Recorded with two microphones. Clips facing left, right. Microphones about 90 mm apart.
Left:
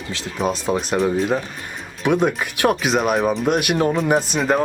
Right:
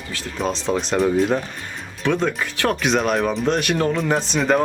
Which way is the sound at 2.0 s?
15° left (ahead or behind).